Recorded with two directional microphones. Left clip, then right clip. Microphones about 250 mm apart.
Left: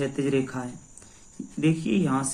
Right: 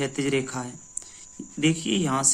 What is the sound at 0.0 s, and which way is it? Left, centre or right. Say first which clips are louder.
Speech: even; right.